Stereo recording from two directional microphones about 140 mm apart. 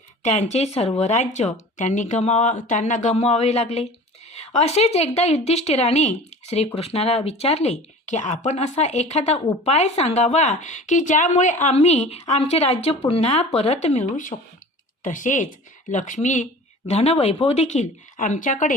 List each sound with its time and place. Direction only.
0.3 s speech: 55° left (ahead or behind)